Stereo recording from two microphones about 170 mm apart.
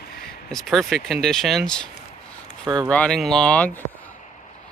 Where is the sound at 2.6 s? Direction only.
25° right (ahead or behind).